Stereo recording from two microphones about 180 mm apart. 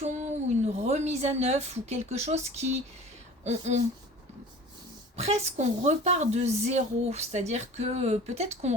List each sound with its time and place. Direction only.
0.0 s a woman's voice: 40° right (ahead or behind)
5.1 s a woman's voice: 40° right (ahead or behind)